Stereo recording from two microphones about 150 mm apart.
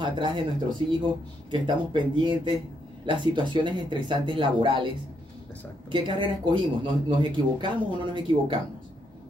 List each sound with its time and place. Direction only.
0.0 s speech: 35° right (ahead or behind)
5.9 s speech: 35° right (ahead or behind)